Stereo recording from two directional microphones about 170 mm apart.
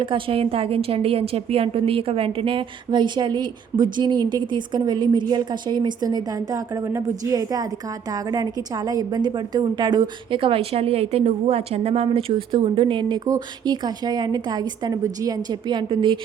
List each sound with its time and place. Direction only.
0.0 s a woman's voice: 30° right (ahead or behind)